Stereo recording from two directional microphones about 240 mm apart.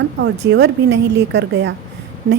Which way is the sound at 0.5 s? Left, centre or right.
Right.